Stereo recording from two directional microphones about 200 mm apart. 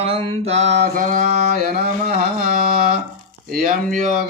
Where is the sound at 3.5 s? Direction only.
45° right (ahead or behind).